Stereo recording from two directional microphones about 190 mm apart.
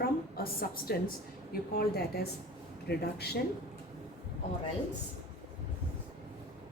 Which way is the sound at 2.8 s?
60° left (ahead or behind).